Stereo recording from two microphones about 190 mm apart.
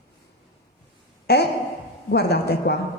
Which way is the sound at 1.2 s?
60° left (ahead or behind).